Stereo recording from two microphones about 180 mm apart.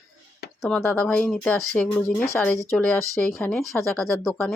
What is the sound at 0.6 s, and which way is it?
Speech, 5° left (ahead or behind).